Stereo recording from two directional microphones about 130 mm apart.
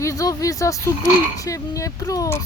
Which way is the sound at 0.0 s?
25° left (ahead or behind).